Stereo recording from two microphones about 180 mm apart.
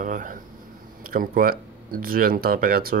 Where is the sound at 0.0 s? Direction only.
45° right (ahead or behind).